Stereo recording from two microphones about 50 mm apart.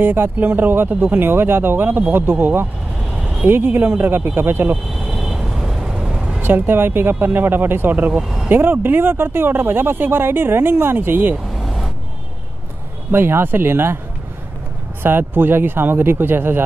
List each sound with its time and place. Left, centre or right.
0.0 s speech: right
4.9 s vehicle: centre
6.4 s speech: right
8.1 s speech: centre
8.5 s speech: right
11.5 s vehicle: centre
13.1 s speech: right
15.0 s speech: right